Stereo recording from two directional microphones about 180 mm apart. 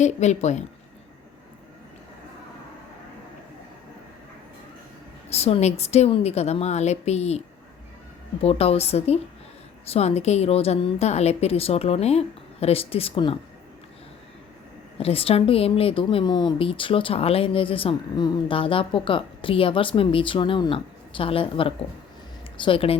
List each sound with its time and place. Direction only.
0.0 s a woman's voice: 40° left (ahead or behind)
5.3 s a woman's voice: 35° left (ahead or behind)
14.9 s speech: 35° left (ahead or behind)